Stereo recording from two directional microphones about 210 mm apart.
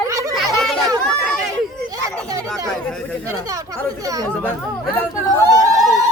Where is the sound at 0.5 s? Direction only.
Centre (ahead or behind).